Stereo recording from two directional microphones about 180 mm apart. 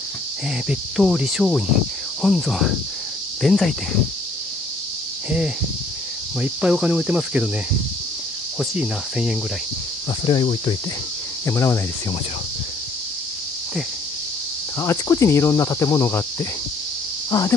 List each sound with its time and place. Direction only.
0.7 s cricket: 5° right (ahead or behind)
6.4 s cricket: 5° right (ahead or behind)
8.5 s cricket: 5° right (ahead or behind)
10.2 s cricket: 25° left (ahead or behind)
11.4 s cricket: 15° left (ahead or behind)
14.8 s cricket: 15° left (ahead or behind)
17.3 s speech: 20° left (ahead or behind)